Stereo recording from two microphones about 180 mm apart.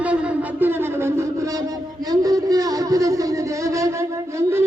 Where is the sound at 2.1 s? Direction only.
20° right (ahead or behind).